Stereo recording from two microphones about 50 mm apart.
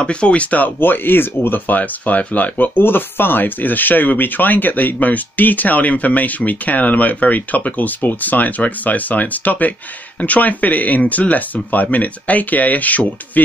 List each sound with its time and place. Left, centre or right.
0.0 s speech: left
0.7 s speech: left